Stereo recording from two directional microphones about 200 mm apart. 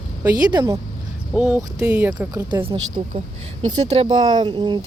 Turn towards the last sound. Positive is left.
turn(degrees=-25)  # may be behind; listen again after turning